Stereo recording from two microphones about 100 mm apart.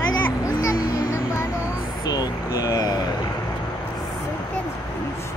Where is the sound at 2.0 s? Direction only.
40° left (ahead or behind).